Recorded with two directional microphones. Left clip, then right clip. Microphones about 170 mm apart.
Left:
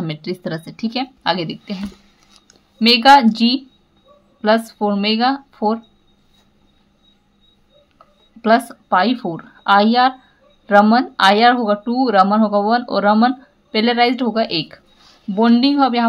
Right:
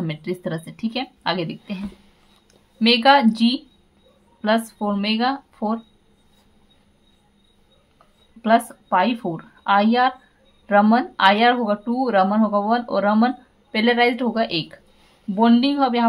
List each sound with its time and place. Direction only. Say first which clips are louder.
0.0 s a woman's voice: left 2 dB; 20° left (ahead or behind)
2.8 s speech: left 5 dB; 20° left (ahead or behind)
8.4 s a woman's voice: left 3 dB; 20° left (ahead or behind)